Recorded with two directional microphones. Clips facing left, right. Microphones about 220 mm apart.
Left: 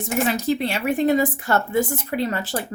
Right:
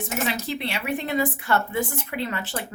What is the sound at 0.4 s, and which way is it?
A woman's voice, 45° left (ahead or behind).